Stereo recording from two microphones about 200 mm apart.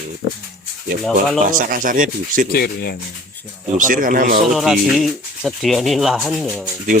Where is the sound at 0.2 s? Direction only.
55° left (ahead or behind).